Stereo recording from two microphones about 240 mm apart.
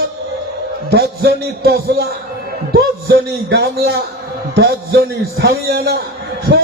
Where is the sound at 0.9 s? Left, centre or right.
Right.